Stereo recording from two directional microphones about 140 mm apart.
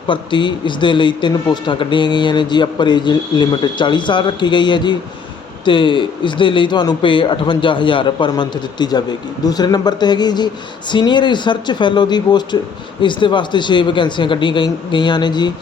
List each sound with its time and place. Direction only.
0.1 s speech: 35° left (ahead or behind)